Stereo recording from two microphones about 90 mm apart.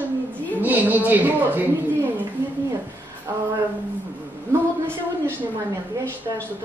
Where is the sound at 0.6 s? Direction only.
20° right (ahead or behind).